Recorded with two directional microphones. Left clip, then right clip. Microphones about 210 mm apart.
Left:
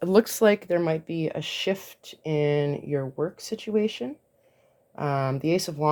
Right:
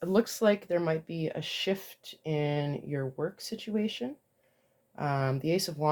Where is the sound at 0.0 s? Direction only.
45° left (ahead or behind).